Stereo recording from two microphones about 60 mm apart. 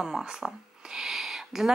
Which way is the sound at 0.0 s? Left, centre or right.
Centre.